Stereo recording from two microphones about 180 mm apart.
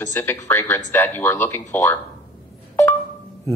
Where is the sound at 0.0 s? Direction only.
15° left (ahead or behind).